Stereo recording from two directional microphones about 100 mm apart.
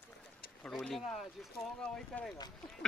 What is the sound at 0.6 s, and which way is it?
Speech, 5° left (ahead or behind).